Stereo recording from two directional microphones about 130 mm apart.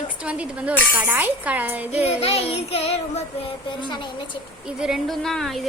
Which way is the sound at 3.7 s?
40° left (ahead or behind).